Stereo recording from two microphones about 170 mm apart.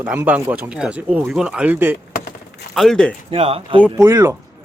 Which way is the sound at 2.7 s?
Centre (ahead or behind).